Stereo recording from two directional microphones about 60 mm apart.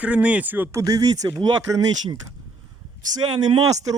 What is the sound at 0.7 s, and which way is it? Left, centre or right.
Speech, right.